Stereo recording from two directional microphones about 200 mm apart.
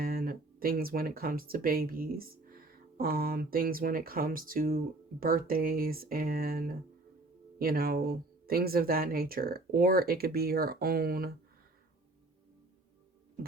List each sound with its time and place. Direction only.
0.0 s speech: 50° right (ahead or behind)